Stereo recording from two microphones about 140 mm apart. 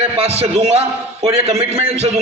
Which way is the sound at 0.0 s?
45° right (ahead or behind).